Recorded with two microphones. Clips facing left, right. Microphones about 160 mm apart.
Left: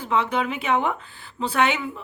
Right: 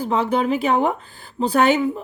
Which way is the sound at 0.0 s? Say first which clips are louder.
Right 4 dB; 35° right (ahead or behind).